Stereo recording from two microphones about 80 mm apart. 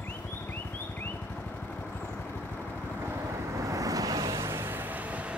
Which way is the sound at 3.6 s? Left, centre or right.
Right.